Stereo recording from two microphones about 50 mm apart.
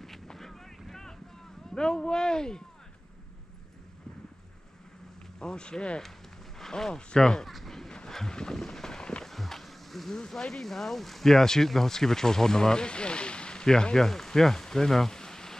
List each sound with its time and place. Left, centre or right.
0.0 s boat: centre
1.7 s speech: centre
5.4 s speech: centre
7.5 s a sound: centre
9.3 s speech: centre